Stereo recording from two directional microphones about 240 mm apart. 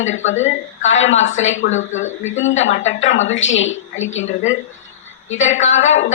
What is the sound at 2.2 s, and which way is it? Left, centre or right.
A woman's voice, left.